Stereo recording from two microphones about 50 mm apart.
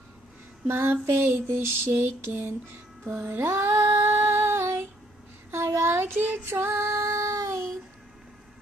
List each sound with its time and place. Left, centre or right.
0.7 s female singing: right
5.5 s a sound: right
6.4 s female singing: right